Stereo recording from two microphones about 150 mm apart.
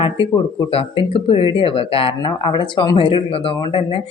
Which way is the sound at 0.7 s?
40° left (ahead or behind).